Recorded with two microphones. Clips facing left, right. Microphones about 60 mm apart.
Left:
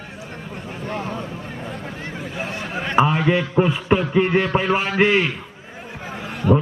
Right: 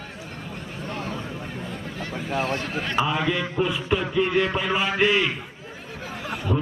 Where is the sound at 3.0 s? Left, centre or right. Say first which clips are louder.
Left 5 dB; left.